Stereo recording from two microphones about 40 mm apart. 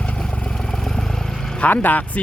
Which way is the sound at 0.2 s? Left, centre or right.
Centre.